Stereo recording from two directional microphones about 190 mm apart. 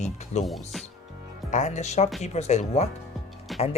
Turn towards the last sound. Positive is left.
turn(degrees=0)  # may be behind; listen again after turning